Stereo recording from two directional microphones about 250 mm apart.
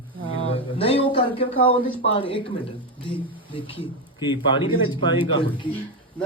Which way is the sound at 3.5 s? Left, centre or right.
Left.